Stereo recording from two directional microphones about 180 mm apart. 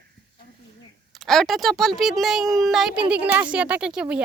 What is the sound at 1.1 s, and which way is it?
A child's voice, centre (ahead or behind).